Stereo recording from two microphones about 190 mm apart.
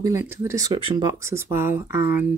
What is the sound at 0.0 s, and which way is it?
Speech, 15° right (ahead or behind).